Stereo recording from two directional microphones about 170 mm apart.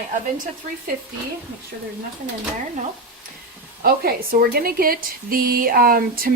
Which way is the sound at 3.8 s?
65° right (ahead or behind).